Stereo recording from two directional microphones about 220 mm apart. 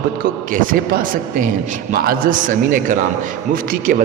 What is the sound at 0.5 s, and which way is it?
A man's voice, 40° right (ahead or behind).